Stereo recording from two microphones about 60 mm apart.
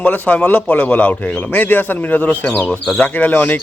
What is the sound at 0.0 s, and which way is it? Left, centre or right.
A man's voice, left.